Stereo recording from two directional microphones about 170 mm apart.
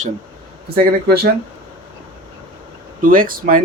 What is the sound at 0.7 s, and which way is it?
Speech, 65° right (ahead or behind).